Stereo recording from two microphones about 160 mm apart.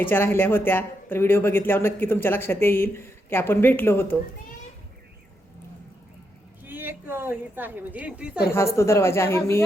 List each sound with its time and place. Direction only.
0.0 s speech: 15° left (ahead or behind)
6.7 s a woman's voice: 10° right (ahead or behind)
8.5 s speech: 15° left (ahead or behind)